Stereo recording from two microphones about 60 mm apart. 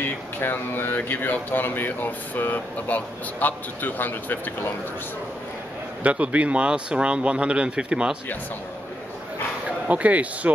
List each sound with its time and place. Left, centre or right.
0.0 s speech: left
6.0 s speech: right
9.7 s speech: right